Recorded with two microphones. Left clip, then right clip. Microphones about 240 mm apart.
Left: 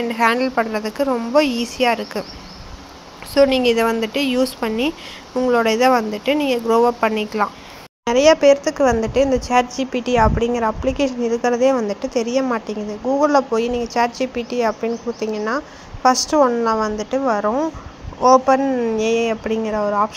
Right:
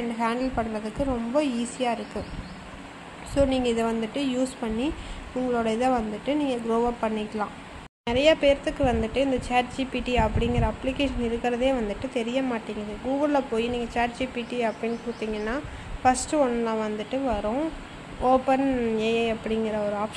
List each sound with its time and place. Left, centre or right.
0.2 s speech: centre
3.3 s speech: centre